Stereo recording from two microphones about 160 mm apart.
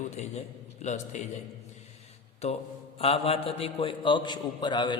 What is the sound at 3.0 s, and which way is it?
A man's voice, 35° left (ahead or behind).